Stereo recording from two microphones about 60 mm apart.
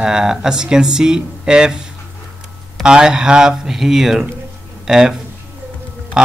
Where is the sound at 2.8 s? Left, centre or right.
Centre.